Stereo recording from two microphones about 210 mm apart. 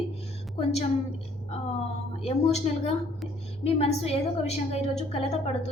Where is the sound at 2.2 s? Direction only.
30° left (ahead or behind).